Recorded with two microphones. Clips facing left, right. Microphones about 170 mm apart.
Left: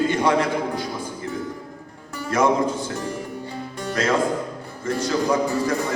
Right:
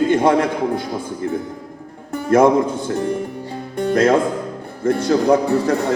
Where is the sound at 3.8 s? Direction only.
55° right (ahead or behind).